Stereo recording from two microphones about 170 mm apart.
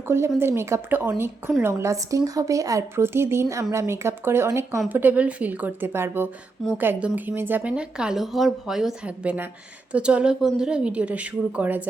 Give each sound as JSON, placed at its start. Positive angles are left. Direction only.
{"t": 0.1, "sound": "speech", "side_deg": -15}